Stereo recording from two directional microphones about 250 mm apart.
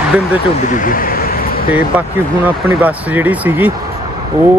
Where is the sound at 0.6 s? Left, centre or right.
Left.